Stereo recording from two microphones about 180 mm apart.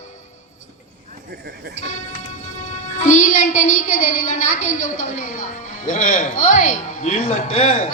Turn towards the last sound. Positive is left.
turn(degrees=45)  # may be behind; listen again after turning